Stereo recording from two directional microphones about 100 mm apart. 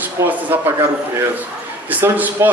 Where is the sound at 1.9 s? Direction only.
15° right (ahead or behind).